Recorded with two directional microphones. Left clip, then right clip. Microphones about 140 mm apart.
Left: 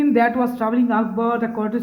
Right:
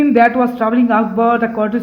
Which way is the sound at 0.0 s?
10° right (ahead or behind).